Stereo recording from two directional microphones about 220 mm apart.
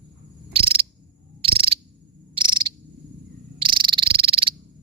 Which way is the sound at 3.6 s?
20° right (ahead or behind).